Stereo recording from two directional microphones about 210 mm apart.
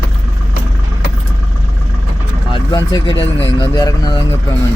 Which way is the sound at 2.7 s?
15° left (ahead or behind).